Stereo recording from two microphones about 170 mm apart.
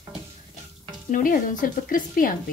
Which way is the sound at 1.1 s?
50° left (ahead or behind).